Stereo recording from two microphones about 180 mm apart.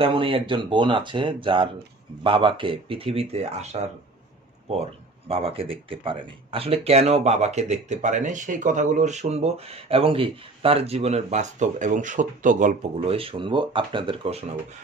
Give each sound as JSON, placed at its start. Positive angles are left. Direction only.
{"t": 0.0, "sound": "speech", "side_deg": -30}
{"t": 5.3, "sound": "speech", "side_deg": -30}